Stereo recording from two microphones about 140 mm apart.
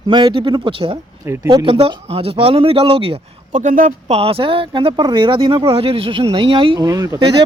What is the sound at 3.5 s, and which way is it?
Speech, 60° right (ahead or behind).